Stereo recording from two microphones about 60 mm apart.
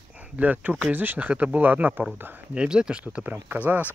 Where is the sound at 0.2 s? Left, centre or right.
Right.